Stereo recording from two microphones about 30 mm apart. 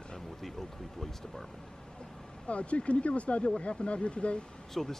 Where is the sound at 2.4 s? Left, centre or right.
Left.